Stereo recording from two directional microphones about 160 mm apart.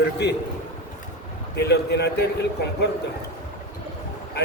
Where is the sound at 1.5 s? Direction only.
90° left.